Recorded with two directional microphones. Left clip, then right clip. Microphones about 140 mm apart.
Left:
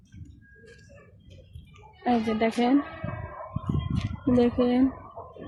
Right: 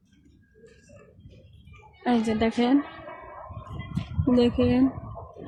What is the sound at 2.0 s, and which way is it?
Speech, 30° right (ahead or behind).